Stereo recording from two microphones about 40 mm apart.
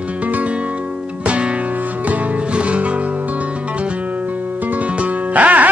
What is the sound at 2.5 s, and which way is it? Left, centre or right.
Music, right.